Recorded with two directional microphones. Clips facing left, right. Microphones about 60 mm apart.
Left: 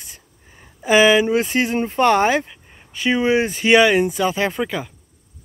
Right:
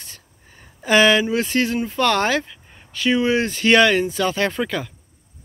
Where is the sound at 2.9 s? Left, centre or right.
Left.